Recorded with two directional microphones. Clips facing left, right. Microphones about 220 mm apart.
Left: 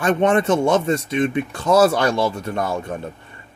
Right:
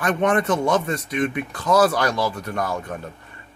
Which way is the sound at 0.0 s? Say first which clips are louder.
Left 3 dB; 25° left (ahead or behind).